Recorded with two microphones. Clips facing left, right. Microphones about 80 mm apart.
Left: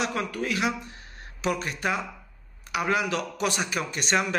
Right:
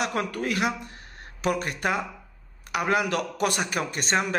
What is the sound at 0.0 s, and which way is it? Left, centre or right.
A man's voice, right.